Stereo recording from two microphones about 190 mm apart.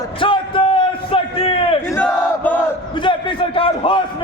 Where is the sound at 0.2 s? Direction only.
25° left (ahead or behind).